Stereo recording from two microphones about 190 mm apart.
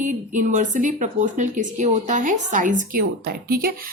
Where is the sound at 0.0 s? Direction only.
40° right (ahead or behind).